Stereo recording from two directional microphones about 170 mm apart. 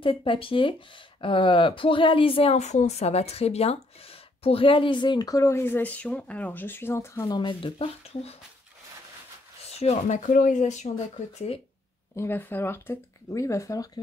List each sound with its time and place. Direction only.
0.0 s speech: 30° left (ahead or behind)
9.8 s speech: 40° left (ahead or behind)
12.2 s speech: 10° left (ahead or behind)